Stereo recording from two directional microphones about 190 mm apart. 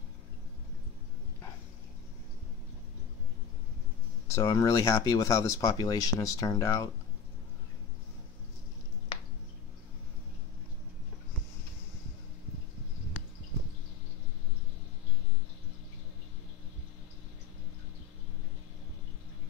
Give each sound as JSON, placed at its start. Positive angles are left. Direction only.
{"t": 4.3, "sound": "speech", "side_deg": 15}